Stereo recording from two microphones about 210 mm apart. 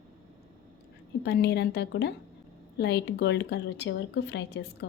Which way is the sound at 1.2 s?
55° left (ahead or behind).